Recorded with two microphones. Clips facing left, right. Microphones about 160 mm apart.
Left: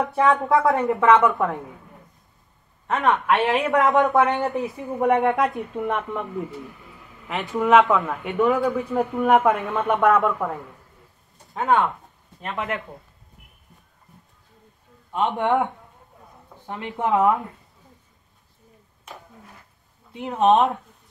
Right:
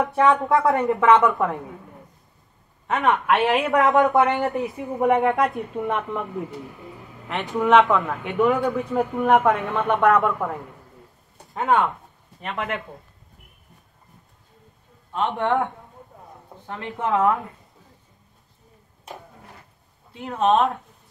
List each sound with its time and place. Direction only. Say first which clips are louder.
0.0 s speech: right 1 dB; centre (ahead or behind)
2.9 s speech: even; centre (ahead or behind)
7.2 s speech: even; centre (ahead or behind)
15.1 s speech: left 1 dB; 15° left (ahead or behind)
15.4 s speech: left 1 dB; centre (ahead or behind)
16.8 s speech: left 1 dB; 15° left (ahead or behind)
20.1 s speech: left 2 dB; 15° left (ahead or behind)